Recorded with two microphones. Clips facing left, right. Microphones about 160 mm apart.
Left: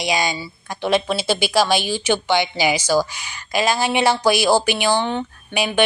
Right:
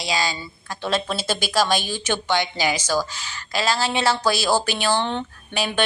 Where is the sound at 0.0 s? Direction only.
20° left (ahead or behind).